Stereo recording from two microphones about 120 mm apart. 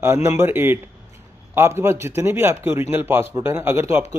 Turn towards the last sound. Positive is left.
turn(degrees=-20)  # may be behind; listen again after turning